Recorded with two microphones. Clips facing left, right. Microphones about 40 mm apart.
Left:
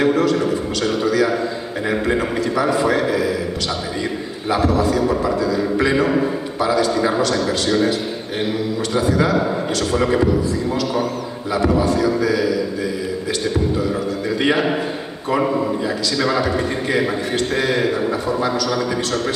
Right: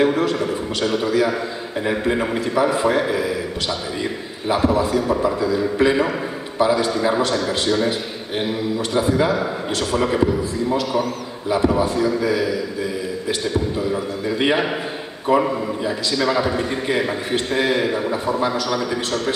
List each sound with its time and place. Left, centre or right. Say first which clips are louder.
0.0 s a sound: left 2 dB; centre
0.4 s a man's voice: left 2 dB; centre
1.0 s a man's voice: left 4 dB; centre
4.5 s a man's voice: left 1 dB; centre
6.9 s a man's voice: left 1 dB; centre
8.9 s a man's voice: left 1 dB; centre
9.9 s a man's voice: left 2 dB; centre
11.5 s a man's voice: left 1 dB; centre
14.4 s a man's voice: left 1 dB; centre
16.2 s a man's voice: left 1 dB; centre